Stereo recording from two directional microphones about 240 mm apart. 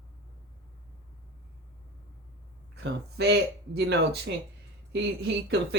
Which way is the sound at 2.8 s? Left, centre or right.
Right.